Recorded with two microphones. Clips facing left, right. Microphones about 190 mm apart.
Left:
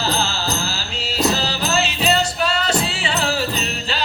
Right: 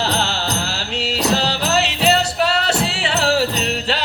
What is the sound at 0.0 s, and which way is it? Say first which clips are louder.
Music: right 1 dB; 75° right (ahead or behind).